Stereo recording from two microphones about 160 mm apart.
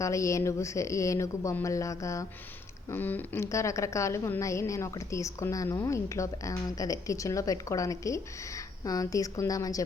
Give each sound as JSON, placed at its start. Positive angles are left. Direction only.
{"t": 0.0, "sound": "a woman's voice", "side_deg": 20}